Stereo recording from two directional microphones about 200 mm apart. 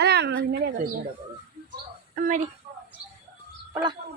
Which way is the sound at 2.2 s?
40° right (ahead or behind).